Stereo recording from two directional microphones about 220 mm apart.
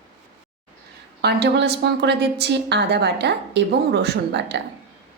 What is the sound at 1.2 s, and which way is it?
A woman's voice, 50° right (ahead or behind).